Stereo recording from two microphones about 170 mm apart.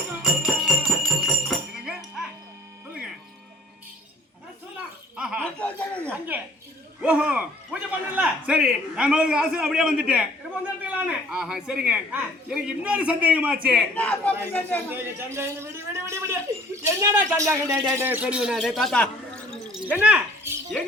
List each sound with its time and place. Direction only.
0.2 s music: centre (ahead or behind)
5.1 s laughter: 5° right (ahead or behind)
5.4 s a sound: 10° left (ahead or behind)
7.0 s a man's voice: 10° right (ahead or behind)
13.9 s speech: 10° left (ahead or behind)
14.8 s a man's voice: 10° right (ahead or behind); by 19.8 s 5° left (ahead or behind)
19.8 s a sound: 10° right (ahead or behind)